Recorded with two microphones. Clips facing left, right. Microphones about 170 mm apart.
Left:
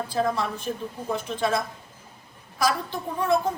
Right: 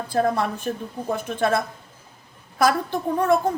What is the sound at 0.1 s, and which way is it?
A woman's voice, 55° right (ahead or behind).